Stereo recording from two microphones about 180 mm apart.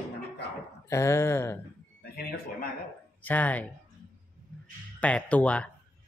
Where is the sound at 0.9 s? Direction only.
15° left (ahead or behind).